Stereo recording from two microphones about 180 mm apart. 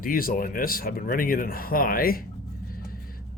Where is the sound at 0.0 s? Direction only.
50° left (ahead or behind).